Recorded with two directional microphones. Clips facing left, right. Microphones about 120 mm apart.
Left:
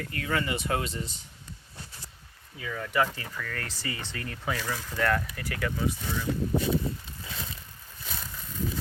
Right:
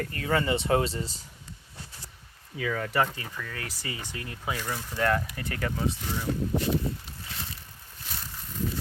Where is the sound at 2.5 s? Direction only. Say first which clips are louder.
Right 5 dB; 90° right.